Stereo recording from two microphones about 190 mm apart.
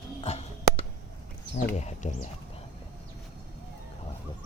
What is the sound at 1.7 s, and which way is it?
Speech, 35° left (ahead or behind).